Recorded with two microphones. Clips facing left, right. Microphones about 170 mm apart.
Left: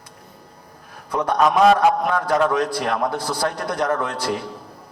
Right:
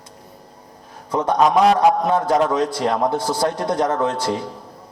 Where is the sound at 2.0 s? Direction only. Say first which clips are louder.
Right 2 dB; 25° right (ahead or behind).